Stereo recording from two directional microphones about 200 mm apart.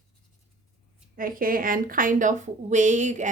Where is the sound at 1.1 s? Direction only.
45° right (ahead or behind).